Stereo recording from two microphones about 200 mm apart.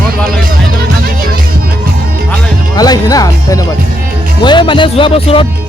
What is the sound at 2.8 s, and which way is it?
Speech, 20° left (ahead or behind).